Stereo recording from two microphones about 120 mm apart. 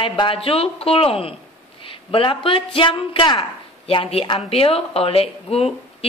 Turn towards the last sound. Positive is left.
turn(degrees=55)  # may be behind; listen again after turning